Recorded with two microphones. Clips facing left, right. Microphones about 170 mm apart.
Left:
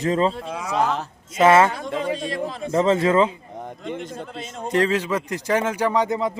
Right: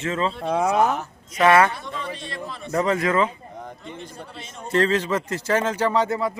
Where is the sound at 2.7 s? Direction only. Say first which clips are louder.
Left 3 dB; 25° left (ahead or behind).